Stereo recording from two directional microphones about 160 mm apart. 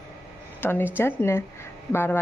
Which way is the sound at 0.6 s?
15° left (ahead or behind).